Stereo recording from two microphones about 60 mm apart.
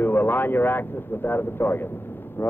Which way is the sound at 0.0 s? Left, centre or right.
Left.